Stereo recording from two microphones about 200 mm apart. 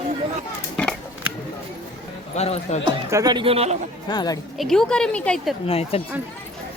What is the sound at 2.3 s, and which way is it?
Speech, 35° left (ahead or behind).